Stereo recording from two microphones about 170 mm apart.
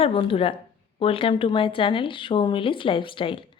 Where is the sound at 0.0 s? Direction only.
30° left (ahead or behind).